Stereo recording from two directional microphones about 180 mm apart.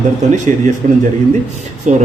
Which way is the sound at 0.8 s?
45° right (ahead or behind).